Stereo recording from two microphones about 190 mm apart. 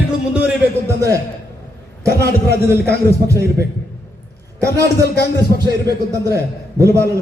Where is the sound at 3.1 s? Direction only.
15° right (ahead or behind).